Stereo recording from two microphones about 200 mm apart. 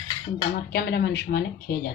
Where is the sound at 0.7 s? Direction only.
55° left (ahead or behind).